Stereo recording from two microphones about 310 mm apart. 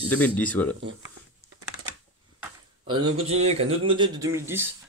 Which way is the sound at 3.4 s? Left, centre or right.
Centre.